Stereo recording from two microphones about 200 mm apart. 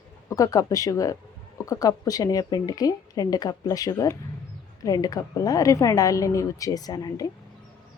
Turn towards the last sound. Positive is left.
turn(degrees=20)  # may be behind; listen again after turning